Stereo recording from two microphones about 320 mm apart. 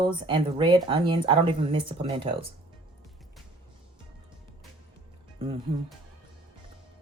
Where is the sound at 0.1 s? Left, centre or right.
Centre.